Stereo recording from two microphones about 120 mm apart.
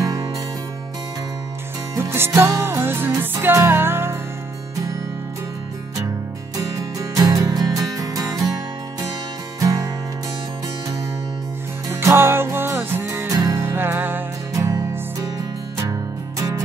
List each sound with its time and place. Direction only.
0.0 s music: 30° right (ahead or behind)
2.0 s music: 20° right (ahead or behind)
6.5 s music: 30° right (ahead or behind)
9.6 s music: 30° right (ahead or behind)
11.9 s music: 20° right (ahead or behind)
14.5 s music: 30° right (ahead or behind)